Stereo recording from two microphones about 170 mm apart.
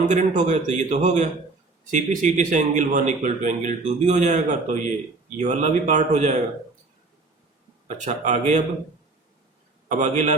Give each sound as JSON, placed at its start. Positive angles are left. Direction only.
{"t": 0.1, "sound": "speech", "side_deg": -45}
{"t": 7.9, "sound": "speech", "side_deg": -45}
{"t": 9.9, "sound": "speech", "side_deg": -45}